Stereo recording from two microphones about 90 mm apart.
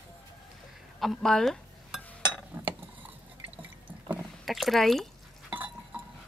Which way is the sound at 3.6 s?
20° right (ahead or behind).